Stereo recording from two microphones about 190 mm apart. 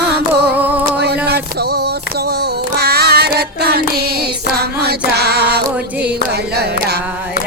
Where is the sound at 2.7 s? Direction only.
55° right (ahead or behind).